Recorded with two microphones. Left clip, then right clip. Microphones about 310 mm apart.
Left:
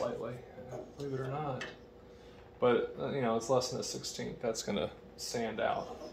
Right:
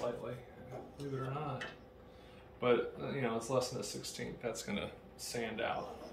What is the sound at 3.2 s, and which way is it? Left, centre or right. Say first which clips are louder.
Speech: left 5 dB; centre.